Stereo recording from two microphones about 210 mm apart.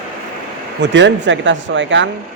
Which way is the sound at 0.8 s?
60° right (ahead or behind).